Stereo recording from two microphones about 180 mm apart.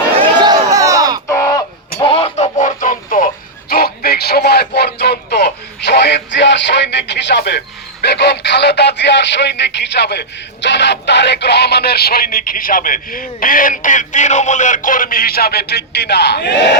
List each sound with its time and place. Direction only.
0.2 s crowd: 25° right (ahead or behind)
1.3 s a sound: 15° left (ahead or behind); by 7.6 s 70° left (ahead or behind)
8.0 s speech: 70° left (ahead or behind)